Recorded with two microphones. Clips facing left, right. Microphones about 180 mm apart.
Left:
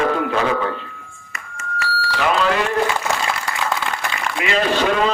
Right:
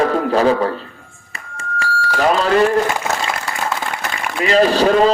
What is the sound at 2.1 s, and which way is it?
Speech, 40° right (ahead or behind).